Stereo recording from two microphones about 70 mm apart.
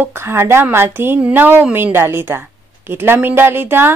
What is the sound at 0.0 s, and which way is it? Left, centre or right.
Speech, right.